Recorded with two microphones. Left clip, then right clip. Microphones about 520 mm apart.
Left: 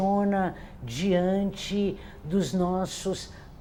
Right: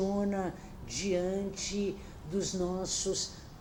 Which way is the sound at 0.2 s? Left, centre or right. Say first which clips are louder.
Left 7 dB; left.